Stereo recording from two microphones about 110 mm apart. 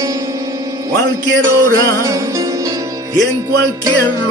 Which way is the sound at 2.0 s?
30° right (ahead or behind).